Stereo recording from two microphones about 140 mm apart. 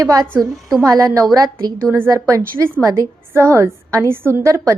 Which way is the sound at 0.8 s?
25° right (ahead or behind).